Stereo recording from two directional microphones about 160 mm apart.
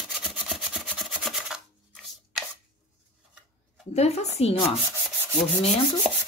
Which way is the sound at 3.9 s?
40° left (ahead or behind).